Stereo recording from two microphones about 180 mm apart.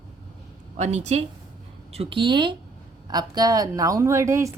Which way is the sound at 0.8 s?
40° right (ahead or behind).